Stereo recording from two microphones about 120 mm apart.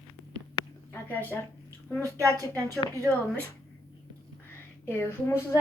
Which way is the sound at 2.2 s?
30° right (ahead or behind).